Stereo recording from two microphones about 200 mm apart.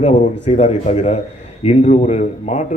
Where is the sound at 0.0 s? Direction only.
35° left (ahead or behind).